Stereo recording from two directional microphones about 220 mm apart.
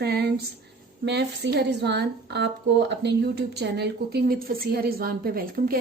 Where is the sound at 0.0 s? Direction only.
45° right (ahead or behind).